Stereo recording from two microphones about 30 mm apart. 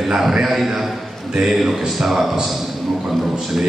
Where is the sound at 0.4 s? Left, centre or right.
Centre.